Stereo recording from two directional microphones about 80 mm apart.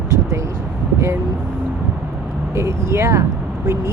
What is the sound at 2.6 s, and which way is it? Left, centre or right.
Speech, right.